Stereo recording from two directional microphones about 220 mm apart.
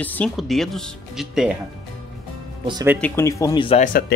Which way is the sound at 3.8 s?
40° left (ahead or behind).